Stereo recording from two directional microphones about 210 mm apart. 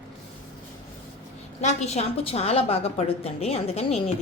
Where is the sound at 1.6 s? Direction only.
30° left (ahead or behind).